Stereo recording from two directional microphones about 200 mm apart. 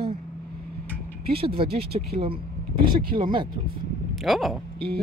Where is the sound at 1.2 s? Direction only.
25° right (ahead or behind).